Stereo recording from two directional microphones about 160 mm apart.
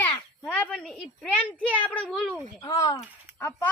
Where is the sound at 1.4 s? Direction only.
10° left (ahead or behind).